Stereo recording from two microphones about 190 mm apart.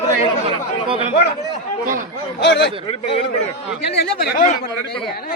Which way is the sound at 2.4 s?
65° left (ahead or behind).